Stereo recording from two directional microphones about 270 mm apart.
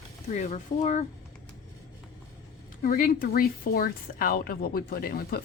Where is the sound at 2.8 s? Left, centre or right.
Left.